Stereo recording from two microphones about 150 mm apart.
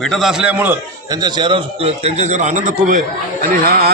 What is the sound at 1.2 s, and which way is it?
A man's voice, 30° right (ahead or behind).